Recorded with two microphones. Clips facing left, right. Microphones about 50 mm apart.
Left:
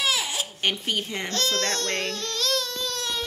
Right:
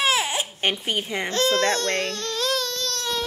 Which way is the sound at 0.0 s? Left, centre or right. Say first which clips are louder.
Right 4 dB; right.